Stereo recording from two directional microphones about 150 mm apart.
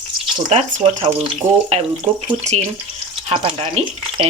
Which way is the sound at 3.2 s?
40° right (ahead or behind).